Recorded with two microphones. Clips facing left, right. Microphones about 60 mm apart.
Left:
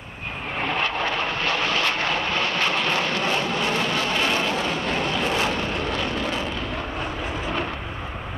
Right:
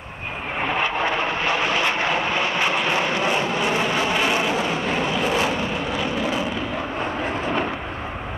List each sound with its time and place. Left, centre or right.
0.6 s vehicle: centre